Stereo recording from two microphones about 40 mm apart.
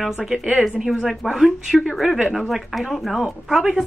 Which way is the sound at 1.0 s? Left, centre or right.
Centre.